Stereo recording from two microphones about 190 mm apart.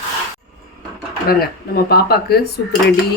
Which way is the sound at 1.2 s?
55° left (ahead or behind).